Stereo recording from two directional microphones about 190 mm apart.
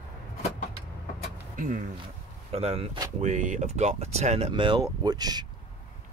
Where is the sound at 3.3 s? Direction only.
40° right (ahead or behind); by 5.5 s 20° right (ahead or behind).